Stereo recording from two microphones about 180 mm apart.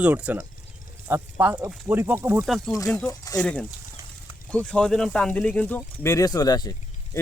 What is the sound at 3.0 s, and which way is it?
Speech, 20° left (ahead or behind).